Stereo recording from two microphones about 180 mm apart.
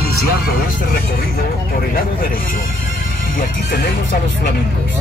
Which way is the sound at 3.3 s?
55° left (ahead or behind).